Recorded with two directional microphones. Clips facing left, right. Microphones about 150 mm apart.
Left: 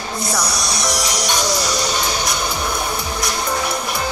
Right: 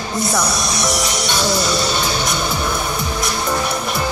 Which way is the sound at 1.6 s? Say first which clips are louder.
Right 2 dB; 25° right (ahead or behind).